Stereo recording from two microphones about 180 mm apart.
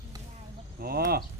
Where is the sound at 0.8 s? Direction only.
55° right (ahead or behind).